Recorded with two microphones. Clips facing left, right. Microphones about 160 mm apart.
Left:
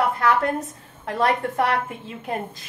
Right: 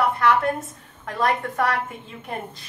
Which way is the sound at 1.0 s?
30° left (ahead or behind).